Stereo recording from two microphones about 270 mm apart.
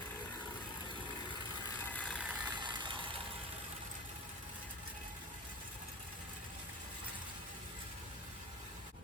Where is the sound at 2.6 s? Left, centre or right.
Centre.